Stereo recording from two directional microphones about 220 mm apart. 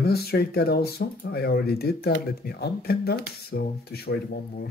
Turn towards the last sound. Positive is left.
turn(degrees=45)  # may be behind; listen again after turning